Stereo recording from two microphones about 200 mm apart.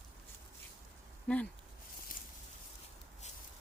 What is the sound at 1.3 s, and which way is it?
Speech, 5° left (ahead or behind).